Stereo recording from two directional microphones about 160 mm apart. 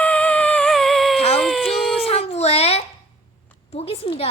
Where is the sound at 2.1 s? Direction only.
40° left (ahead or behind).